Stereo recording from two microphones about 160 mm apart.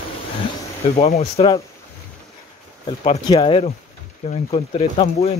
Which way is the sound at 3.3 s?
30° left (ahead or behind).